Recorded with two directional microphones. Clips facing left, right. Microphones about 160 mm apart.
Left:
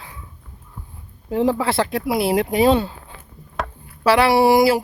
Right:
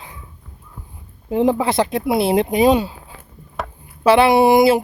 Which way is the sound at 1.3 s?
20° right (ahead or behind).